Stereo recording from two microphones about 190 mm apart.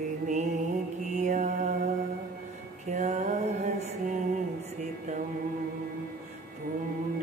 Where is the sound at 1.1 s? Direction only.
40° right (ahead or behind).